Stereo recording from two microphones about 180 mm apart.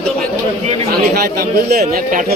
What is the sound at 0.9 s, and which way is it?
A man's voice, 55° right (ahead or behind).